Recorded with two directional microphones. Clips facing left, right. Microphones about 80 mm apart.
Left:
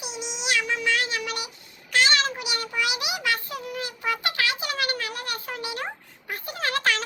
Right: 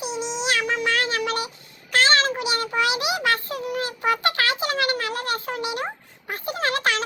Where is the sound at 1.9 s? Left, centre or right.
Right.